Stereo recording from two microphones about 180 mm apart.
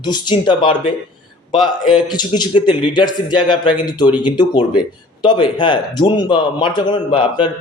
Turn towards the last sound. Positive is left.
turn(degrees=25)  # may be behind; listen again after turning